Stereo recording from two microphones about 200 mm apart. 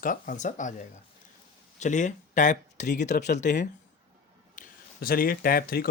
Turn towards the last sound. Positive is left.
turn(degrees=45)  # may be behind; listen again after turning